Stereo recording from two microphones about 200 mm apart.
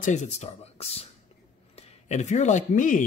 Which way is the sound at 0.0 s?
35° left (ahead or behind).